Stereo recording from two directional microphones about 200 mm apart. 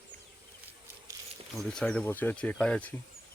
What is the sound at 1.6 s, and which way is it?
Speech, 5° left (ahead or behind).